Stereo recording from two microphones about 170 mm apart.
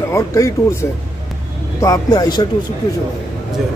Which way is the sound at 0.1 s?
15° left (ahead or behind).